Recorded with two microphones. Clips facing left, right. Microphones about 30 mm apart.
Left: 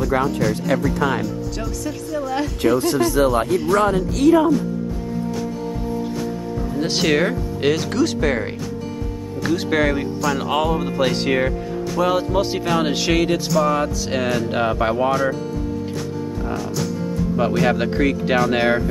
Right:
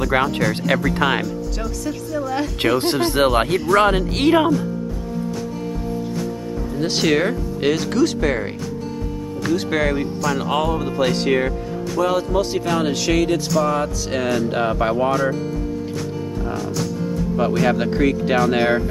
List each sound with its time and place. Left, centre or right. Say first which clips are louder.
0.0 s speech: right 1 dB; right
1.2 s speech: even; centre
2.7 s speech: left 1 dB; right
6.7 s speech: right 1 dB; centre
16.4 s speech: even; centre